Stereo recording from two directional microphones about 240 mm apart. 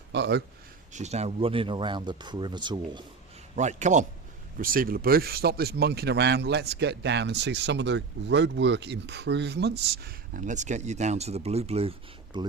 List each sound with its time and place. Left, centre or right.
0.1 s speech: right
0.9 s speech: right
3.5 s speech: right